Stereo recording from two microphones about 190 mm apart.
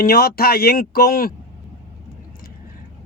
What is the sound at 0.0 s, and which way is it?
Speech, 50° left (ahead or behind).